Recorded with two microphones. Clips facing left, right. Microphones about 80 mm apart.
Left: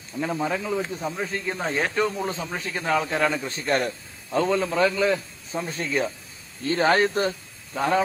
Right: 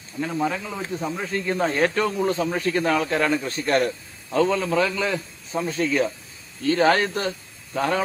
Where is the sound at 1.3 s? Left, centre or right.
Centre.